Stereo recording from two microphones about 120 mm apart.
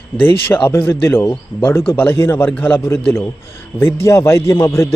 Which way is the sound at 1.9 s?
20° left (ahead or behind).